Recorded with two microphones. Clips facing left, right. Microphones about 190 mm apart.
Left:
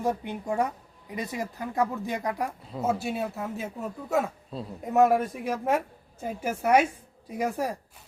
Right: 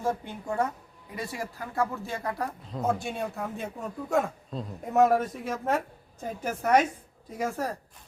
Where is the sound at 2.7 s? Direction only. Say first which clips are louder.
Left 1 dB; 5° left (ahead or behind).